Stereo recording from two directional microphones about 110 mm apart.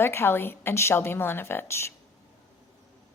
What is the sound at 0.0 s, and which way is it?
A woman's voice, 20° left (ahead or behind).